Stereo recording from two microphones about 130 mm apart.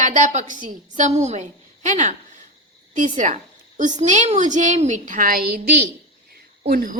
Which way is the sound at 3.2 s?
70° right (ahead or behind).